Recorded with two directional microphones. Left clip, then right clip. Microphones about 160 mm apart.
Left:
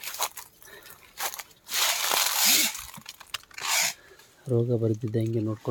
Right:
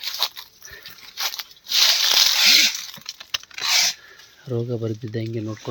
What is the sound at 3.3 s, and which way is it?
Tearing, 30° right (ahead or behind).